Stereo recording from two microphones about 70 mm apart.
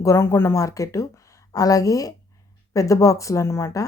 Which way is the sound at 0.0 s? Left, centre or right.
Left.